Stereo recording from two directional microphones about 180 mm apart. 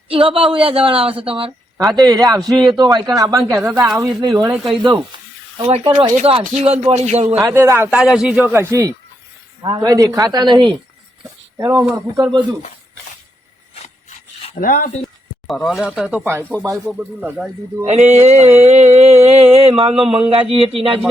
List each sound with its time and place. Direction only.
0.1 s a woman's voice: 30° right (ahead or behind)
5.5 s a sound: 30° right (ahead or behind)
7.4 s a man's voice: 15° right (ahead or behind)
8.7 s a man's voice: 20° right (ahead or behind)
13.8 s rub: 35° left (ahead or behind)
14.6 s speech: 50° left (ahead or behind)
15.6 s a man's voice: centre (ahead or behind)
17.2 s speech: centre (ahead or behind)
17.8 s a sound: 40° right (ahead or behind)